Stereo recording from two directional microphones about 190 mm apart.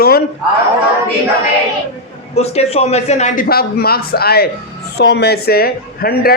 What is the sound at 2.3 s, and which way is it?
A man's voice, 35° left (ahead or behind).